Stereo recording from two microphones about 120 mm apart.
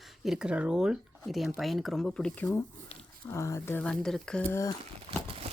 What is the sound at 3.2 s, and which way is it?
Speech, 25° left (ahead or behind).